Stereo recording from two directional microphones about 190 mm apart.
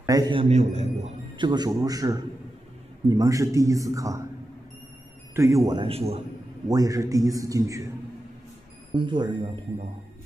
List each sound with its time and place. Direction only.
0.0 s a man's voice: 20° right (ahead or behind)
5.3 s a man's voice: 15° right (ahead or behind); by 6.2 s 30° right (ahead or behind)
6.7 s a man's voice: 20° right (ahead or behind)
8.9 s a man's voice: 25° right (ahead or behind)